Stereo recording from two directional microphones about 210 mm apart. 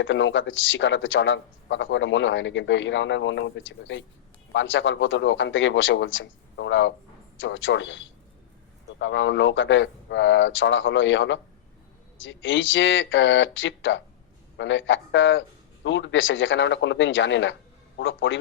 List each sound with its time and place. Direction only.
0.0 s a man's voice: 60° left (ahead or behind)